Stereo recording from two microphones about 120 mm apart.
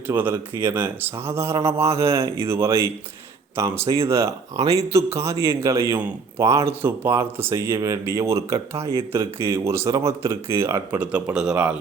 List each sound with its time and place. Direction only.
0.1 s speech: 15° right (ahead or behind)
11.0 s speech: 10° right (ahead or behind)